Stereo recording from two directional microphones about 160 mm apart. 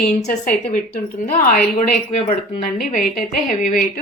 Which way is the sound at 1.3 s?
60° left (ahead or behind).